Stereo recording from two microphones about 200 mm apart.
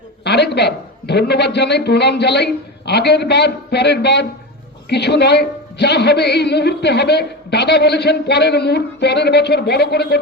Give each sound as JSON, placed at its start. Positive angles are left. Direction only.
{"t": 0.3, "sound": "a man's voice", "side_deg": 55}